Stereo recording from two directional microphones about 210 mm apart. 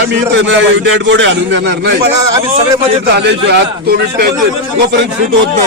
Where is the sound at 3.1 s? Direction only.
55° right (ahead or behind).